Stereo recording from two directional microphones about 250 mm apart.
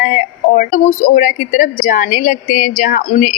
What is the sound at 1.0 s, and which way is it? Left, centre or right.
A woman's voice, left.